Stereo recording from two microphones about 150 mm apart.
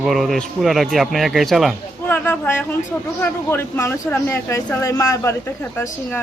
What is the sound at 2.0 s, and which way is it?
Speech, 10° left (ahead or behind).